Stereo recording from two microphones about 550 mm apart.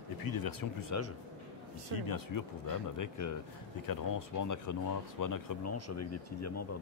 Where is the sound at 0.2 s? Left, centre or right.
Left.